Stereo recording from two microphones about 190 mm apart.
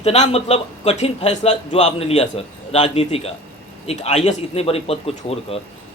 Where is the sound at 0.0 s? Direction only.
35° left (ahead or behind).